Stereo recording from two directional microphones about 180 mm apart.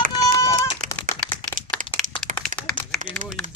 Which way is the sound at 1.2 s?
5° left (ahead or behind).